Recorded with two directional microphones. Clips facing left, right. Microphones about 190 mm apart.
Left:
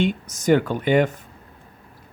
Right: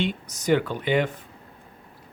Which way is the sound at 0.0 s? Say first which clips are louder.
Left 5 dB; 45° left (ahead or behind).